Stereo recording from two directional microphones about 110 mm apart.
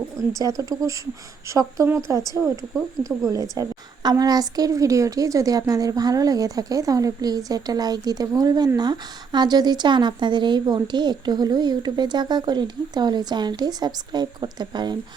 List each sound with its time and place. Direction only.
0.3 s a woman's voice: 30° right (ahead or behind)
2.4 s a woman's voice: 20° right (ahead or behind)
3.2 s a woman's voice: 30° right (ahead or behind)